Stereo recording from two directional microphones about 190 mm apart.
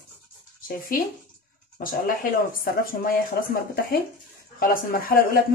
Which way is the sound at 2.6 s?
50° left (ahead or behind).